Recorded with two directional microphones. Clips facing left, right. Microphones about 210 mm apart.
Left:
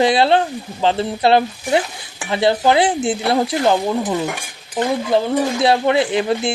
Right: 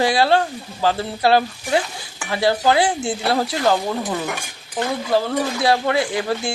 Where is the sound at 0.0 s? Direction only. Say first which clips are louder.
Left 3 dB; 20° left (ahead or behind).